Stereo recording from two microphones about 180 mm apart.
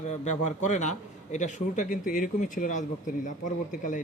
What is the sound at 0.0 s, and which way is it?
A man's voice, 40° left (ahead or behind).